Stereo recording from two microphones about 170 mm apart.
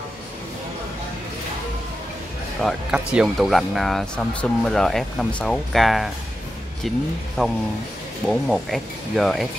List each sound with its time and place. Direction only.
2.6 s speech: 5° right (ahead or behind)
7.4 s speech: centre (ahead or behind)